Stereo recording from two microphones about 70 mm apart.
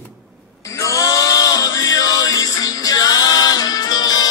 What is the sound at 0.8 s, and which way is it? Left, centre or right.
Music, left.